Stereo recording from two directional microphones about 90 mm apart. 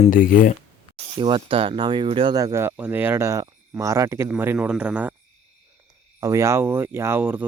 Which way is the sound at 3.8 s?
35° right (ahead or behind).